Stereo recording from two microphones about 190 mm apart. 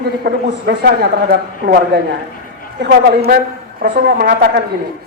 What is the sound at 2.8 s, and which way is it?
A woman's voice, 55° right (ahead or behind).